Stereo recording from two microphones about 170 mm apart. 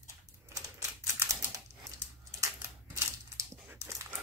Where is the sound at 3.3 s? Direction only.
15° right (ahead or behind).